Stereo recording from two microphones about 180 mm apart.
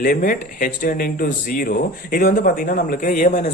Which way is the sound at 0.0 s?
55° left (ahead or behind).